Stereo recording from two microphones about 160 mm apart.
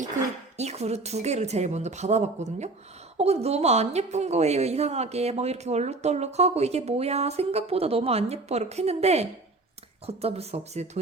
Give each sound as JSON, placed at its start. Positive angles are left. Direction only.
{"t": 0.5, "sound": "a woman's voice", "side_deg": -45}